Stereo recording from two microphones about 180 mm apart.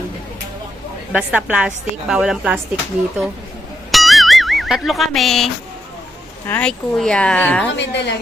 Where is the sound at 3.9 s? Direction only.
Centre (ahead or behind).